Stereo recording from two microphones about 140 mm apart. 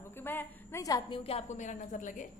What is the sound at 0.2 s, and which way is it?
Speech, 15° left (ahead or behind).